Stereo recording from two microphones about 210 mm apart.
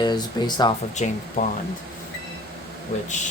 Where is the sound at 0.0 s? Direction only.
20° left (ahead or behind).